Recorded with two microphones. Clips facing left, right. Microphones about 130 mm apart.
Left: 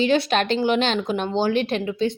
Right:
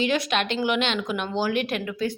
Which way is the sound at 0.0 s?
30° left (ahead or behind).